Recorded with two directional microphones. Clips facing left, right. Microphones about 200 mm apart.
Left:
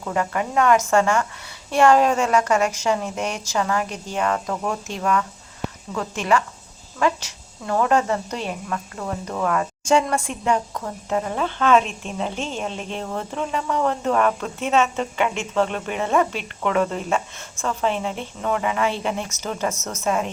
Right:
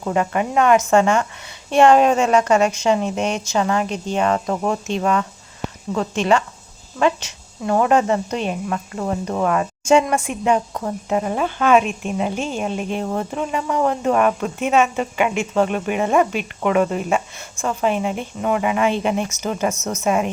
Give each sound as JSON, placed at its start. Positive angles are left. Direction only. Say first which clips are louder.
{"t": 0.0, "sound": "a woman's voice", "louder": "right 4 dB", "side_deg": -20}